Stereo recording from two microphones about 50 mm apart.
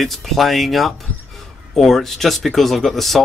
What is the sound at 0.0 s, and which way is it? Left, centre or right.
Speech, centre.